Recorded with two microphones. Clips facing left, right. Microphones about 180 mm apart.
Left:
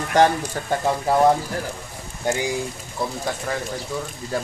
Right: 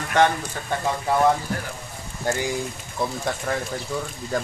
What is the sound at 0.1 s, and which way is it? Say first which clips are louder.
Speech: left 2 dB; 35° left (ahead or behind).